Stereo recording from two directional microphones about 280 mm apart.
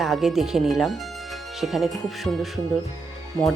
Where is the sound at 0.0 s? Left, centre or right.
Centre.